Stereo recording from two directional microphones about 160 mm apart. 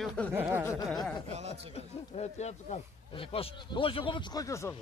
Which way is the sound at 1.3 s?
40° right (ahead or behind).